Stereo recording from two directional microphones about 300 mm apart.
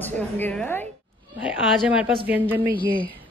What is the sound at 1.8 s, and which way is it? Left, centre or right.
Speech, centre.